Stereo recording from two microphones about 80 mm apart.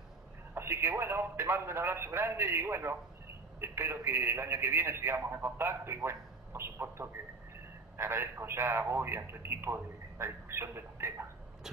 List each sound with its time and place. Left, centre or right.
0.6 s a man's voice: right